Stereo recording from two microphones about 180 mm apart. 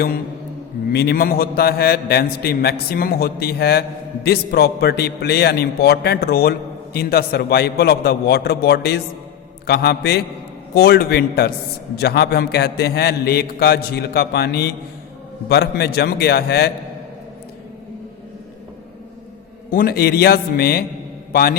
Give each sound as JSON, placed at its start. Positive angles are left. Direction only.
{"t": 0.9, "sound": "a man's voice", "side_deg": 60}
{"t": 19.7, "sound": "a man's voice", "side_deg": 55}